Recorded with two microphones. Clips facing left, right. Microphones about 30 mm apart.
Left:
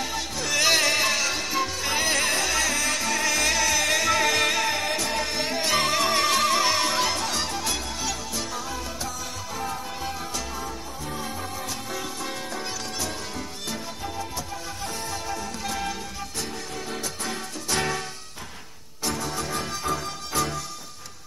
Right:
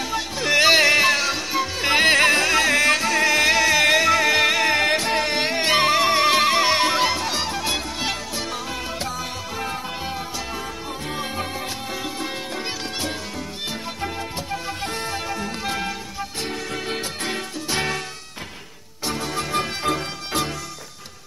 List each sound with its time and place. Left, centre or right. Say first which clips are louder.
0.0 s music: right 4 dB; right
1.8 s music: right 12 dB; right
3.1 s music: right 6 dB; right
4.1 s music: right 4 dB; centre
4.6 s music: right 7 dB; right
8.0 s music: right 4 dB; right
9.6 s music: right 2 dB; right
11.1 s music: right 5 dB; right
11.9 s music: right 4 dB; right
16.7 s music: right 5 dB; right
17.6 s music: right 1 dB; right
19.0 s music: right 3 dB; right
19.8 s music: right 4 dB; right